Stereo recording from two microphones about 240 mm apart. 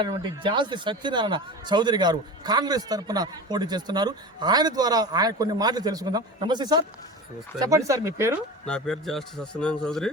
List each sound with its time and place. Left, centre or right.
0.0 s speech: centre
8.6 s speech: centre